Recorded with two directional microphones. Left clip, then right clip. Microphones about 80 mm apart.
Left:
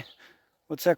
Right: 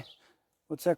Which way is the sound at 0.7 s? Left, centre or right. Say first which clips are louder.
Left 5 dB; centre.